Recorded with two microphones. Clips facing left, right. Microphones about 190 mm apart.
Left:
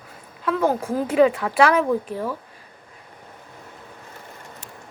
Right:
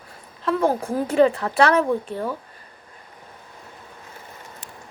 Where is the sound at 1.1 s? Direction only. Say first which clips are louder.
Even; 5° left (ahead or behind).